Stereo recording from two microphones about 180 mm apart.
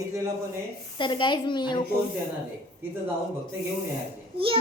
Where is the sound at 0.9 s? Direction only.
25° left (ahead or behind).